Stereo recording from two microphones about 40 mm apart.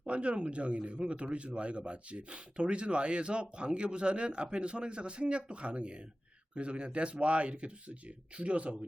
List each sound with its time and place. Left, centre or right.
0.0 s speech: right